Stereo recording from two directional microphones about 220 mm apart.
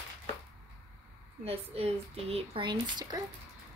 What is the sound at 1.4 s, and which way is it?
Speech, 25° right (ahead or behind).